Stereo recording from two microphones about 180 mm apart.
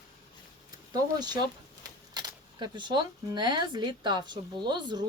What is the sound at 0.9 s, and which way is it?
Speech, 25° right (ahead or behind).